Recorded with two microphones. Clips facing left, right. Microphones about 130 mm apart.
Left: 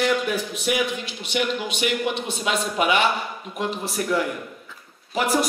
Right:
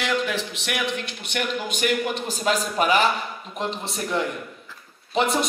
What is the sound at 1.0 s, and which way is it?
Speech, 55° right (ahead or behind).